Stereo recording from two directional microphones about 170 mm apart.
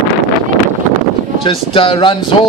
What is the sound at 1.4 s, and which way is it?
Speech, 30° left (ahead or behind).